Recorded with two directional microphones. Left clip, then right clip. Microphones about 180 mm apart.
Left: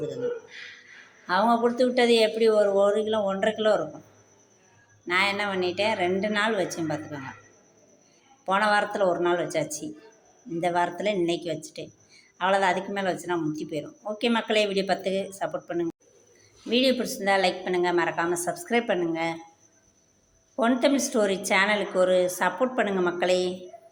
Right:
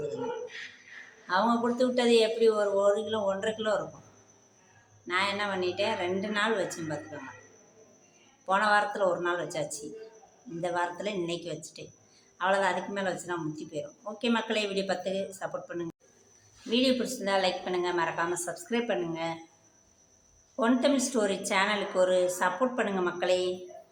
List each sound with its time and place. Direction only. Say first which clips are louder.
1.3 s speech: left 5 dB; 20° left (ahead or behind)
5.0 s speech: left 5 dB; 25° left (ahead or behind)
8.4 s speech: left 2 dB; 20° left (ahead or behind)
20.6 s speech: left 3 dB; 25° left (ahead or behind)